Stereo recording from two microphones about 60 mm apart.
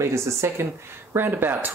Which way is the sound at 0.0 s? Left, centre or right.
Right.